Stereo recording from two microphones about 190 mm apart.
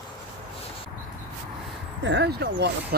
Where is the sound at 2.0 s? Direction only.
65° right (ahead or behind).